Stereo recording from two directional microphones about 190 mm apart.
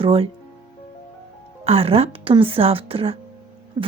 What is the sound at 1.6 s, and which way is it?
Speech, 30° right (ahead or behind).